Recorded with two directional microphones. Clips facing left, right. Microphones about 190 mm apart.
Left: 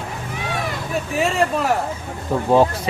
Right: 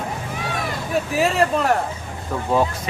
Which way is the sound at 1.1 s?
Centre (ahead or behind).